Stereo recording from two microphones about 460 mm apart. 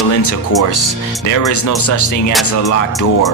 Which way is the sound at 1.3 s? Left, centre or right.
Left.